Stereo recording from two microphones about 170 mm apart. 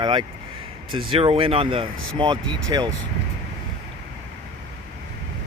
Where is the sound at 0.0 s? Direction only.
25° right (ahead or behind).